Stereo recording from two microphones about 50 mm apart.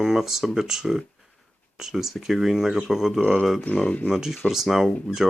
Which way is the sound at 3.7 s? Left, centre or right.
Left.